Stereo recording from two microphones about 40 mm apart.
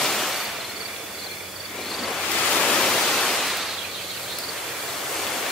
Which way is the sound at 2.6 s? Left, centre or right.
Centre.